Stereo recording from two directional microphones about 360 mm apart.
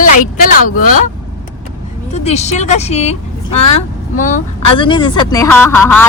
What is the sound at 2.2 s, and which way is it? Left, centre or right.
Speech, centre.